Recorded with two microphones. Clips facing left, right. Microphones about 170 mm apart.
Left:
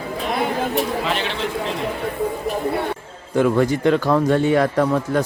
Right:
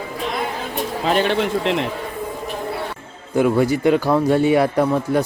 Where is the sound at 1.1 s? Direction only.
50° right (ahead or behind); by 1.8 s 75° right (ahead or behind).